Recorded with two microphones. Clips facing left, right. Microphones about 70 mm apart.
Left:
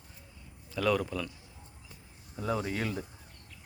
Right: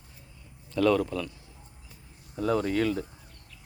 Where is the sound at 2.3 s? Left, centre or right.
Centre.